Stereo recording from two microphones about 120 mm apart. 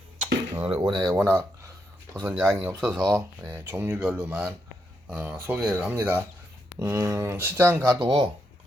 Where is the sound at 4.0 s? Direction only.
10° right (ahead or behind).